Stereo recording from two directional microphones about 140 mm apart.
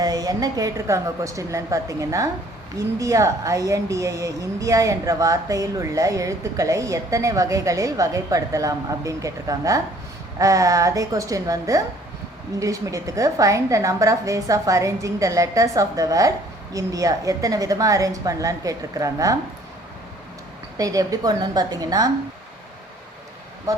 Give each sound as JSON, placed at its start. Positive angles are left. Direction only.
{"t": 0.0, "sound": "speech", "side_deg": -25}
{"t": 20.7, "sound": "speech", "side_deg": -25}
{"t": 23.7, "sound": "speech", "side_deg": -25}